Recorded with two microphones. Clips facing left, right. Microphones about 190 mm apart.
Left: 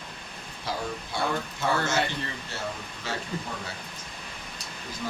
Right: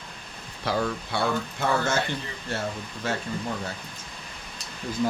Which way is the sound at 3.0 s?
50° right (ahead or behind).